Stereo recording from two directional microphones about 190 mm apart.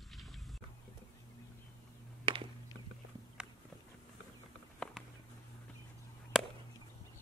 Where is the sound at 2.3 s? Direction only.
30° right (ahead or behind).